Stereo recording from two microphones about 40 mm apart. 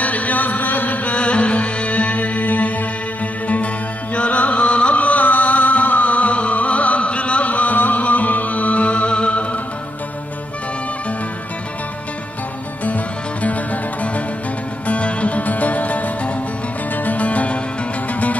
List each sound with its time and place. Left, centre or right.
0.0 s music: left
1.1 s music: left
12.8 s music: left